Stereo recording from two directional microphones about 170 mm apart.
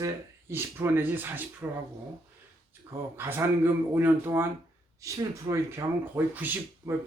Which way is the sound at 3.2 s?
15° right (ahead or behind).